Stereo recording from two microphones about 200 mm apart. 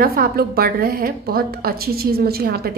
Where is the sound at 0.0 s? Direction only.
50° right (ahead or behind).